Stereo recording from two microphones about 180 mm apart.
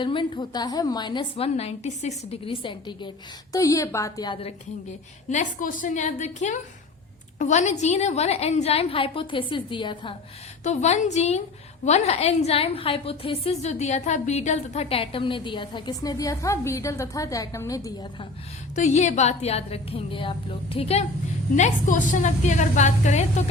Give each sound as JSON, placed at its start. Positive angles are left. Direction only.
{"t": 0.0, "sound": "a woman's voice", "side_deg": 25}
{"t": 5.3, "sound": "a woman's voice", "side_deg": 45}
{"t": 10.6, "sound": "a woman's voice", "side_deg": 40}
{"t": 18.8, "sound": "a woman's voice", "side_deg": 40}
{"t": 21.5, "sound": "a woman's voice", "side_deg": 45}